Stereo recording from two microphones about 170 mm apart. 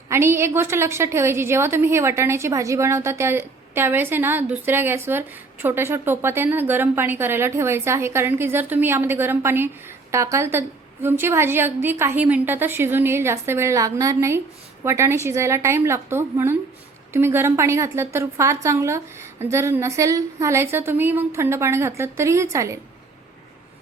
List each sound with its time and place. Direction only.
0.1 s a woman's voice: 15° right (ahead or behind)